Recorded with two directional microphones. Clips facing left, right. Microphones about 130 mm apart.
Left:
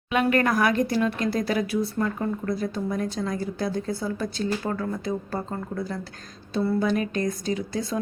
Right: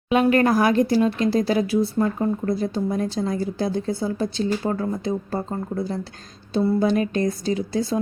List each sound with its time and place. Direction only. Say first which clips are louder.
0.1 s a woman's voice: right 4 dB; 30° right (ahead or behind)